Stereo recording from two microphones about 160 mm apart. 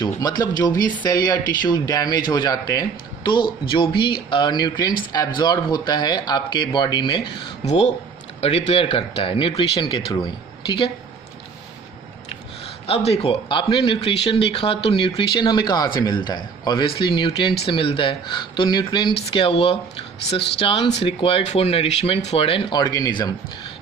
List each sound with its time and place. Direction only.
0.0 s speech: 25° left (ahead or behind)
7.6 s speech: 45° left (ahead or behind)
12.9 s speech: 40° left (ahead or behind); by 23.3 s 25° left (ahead or behind)